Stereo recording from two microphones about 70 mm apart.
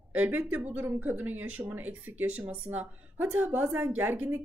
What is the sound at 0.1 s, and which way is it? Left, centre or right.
A woman's voice, right.